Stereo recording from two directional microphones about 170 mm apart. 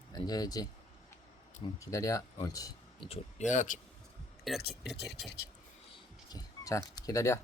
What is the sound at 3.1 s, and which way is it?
Speech, 45° left (ahead or behind).